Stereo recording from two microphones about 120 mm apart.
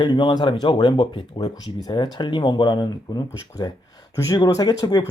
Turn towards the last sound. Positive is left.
turn(degrees=30)  # may be behind; listen again after turning